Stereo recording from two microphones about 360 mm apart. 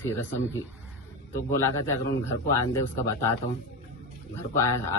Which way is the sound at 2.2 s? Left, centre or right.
Centre.